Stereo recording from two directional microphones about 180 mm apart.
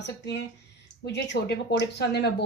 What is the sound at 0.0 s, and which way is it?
Speech, 75° left (ahead or behind).